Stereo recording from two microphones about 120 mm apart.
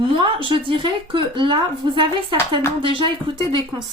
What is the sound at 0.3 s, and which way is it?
Speech, 45° right (ahead or behind).